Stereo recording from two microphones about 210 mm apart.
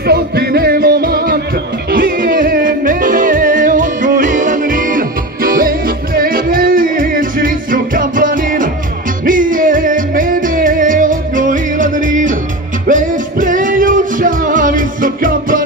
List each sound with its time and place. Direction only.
0.0 s music: 50° right (ahead or behind)